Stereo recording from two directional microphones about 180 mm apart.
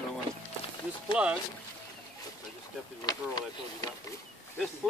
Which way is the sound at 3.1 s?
20° left (ahead or behind).